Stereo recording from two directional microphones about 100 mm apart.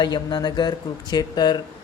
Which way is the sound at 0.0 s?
45° left (ahead or behind).